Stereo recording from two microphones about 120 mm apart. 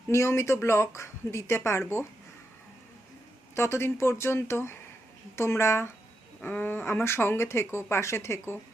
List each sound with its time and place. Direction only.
0.1 s speech: 20° left (ahead or behind)
3.5 s speech: 20° left (ahead or behind)